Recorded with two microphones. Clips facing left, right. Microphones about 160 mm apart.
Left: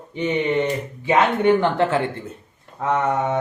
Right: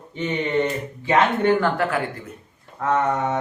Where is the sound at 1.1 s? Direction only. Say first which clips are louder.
Left 2 dB; 20° left (ahead or behind).